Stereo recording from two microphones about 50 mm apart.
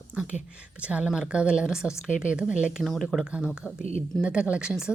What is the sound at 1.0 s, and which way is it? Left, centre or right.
A woman's voice, centre.